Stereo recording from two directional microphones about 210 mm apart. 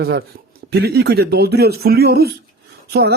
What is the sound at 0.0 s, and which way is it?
Speech, 50° right (ahead or behind).